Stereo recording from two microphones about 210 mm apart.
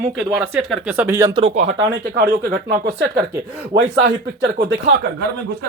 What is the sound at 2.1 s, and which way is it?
Speech, 50° right (ahead or behind).